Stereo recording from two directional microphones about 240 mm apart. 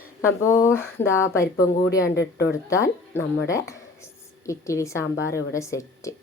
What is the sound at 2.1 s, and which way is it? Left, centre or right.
Speech, left.